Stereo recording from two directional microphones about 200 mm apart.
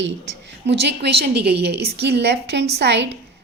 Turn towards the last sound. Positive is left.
turn(degrees=-60)  # may be behind; listen again after turning